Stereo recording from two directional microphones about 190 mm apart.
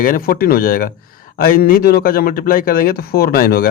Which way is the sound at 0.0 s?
50° left (ahead or behind).